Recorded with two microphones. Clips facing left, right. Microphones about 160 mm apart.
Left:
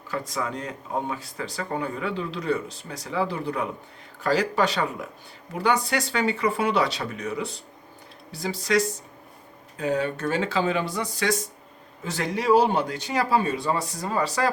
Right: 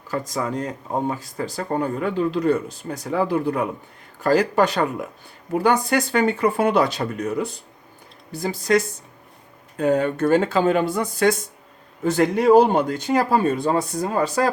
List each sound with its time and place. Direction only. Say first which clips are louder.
0.1 s speech: right 4 dB; 40° right (ahead or behind)